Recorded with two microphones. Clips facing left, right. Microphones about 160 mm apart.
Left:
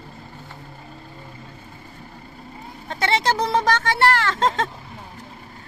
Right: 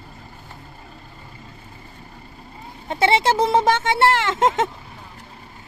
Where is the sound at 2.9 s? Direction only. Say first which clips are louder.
Right 4 dB; 25° right (ahead or behind).